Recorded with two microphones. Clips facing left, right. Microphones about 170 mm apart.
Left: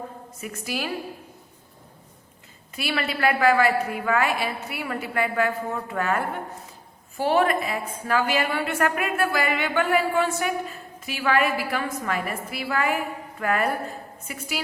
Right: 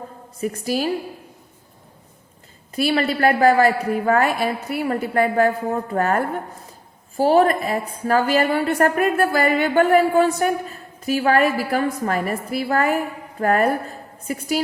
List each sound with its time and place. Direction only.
0.3 s a woman's voice: 35° right (ahead or behind)
2.7 s a woman's voice: 40° right (ahead or behind)